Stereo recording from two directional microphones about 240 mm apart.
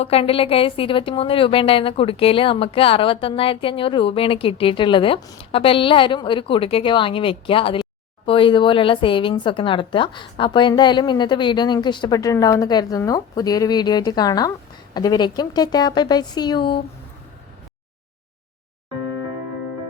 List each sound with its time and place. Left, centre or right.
0.0 s a woman's voice: left